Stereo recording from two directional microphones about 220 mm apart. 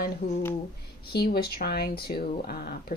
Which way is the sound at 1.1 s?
45° left (ahead or behind).